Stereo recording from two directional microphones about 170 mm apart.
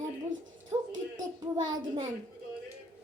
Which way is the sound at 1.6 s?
25° right (ahead or behind).